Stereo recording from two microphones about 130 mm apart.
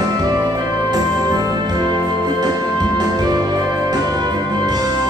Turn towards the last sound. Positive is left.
turn(degrees=-30)  # may be behind; listen again after turning